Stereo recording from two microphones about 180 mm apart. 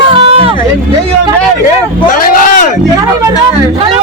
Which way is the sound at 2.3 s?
50° left (ahead or behind).